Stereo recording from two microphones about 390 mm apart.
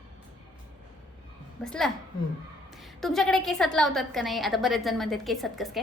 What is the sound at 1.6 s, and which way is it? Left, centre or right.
Speech, centre.